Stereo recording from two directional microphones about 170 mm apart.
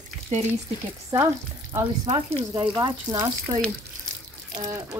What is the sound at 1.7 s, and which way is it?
Speech, 20° right (ahead or behind).